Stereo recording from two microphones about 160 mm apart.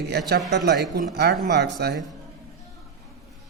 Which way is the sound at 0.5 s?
90° right.